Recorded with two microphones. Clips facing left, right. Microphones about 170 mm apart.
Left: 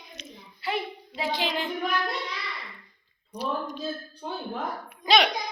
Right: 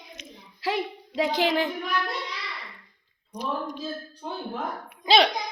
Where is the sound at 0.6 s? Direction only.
90° right.